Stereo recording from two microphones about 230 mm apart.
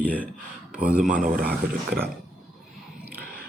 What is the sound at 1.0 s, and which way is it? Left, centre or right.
Speech, right.